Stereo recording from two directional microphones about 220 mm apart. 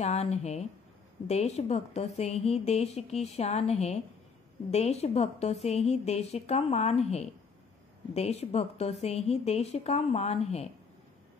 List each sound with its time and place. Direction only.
0.0 s a woman's voice: 30° left (ahead or behind)